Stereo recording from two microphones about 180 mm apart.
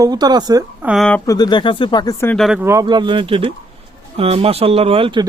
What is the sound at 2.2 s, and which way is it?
Speech, 5° left (ahead or behind).